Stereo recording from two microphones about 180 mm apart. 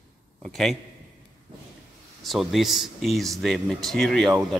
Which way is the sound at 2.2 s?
Centre (ahead or behind).